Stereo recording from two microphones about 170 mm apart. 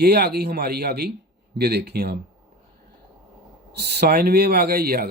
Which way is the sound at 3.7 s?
70° right (ahead or behind).